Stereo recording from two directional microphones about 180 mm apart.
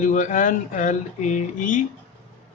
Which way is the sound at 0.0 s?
45° left (ahead or behind).